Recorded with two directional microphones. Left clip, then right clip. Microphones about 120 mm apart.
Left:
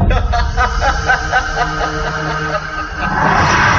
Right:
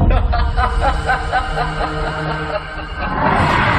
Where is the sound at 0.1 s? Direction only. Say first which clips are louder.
Left 3 dB; 40° right (ahead or behind).